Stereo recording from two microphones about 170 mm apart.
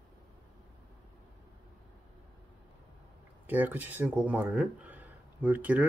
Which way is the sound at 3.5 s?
10° right (ahead or behind).